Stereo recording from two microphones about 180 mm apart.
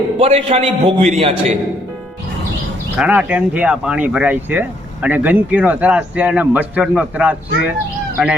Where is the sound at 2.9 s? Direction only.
10° right (ahead or behind).